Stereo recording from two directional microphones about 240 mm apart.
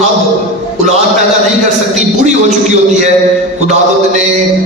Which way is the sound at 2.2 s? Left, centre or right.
Right.